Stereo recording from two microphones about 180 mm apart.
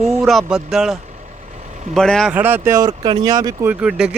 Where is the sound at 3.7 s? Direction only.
5° right (ahead or behind).